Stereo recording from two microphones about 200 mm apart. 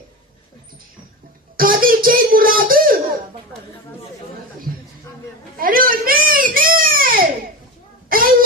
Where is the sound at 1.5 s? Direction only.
45° right (ahead or behind).